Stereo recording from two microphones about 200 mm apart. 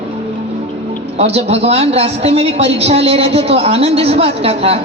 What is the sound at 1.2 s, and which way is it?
A woman's voice, 30° right (ahead or behind).